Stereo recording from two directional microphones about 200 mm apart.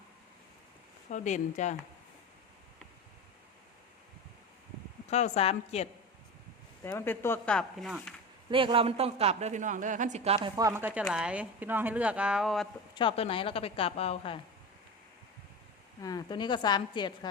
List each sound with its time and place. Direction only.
1.1 s a woman's voice: 35° left (ahead or behind)
5.0 s a woman's voice: 35° left (ahead or behind)
6.8 s speech: 10° left (ahead or behind)
8.4 s a man's voice: 25° right (ahead or behind)
10.6 s speech: 10° right (ahead or behind)
12.9 s a woman's voice: 25° left (ahead or behind)
16.0 s a woman's voice: 20° left (ahead or behind)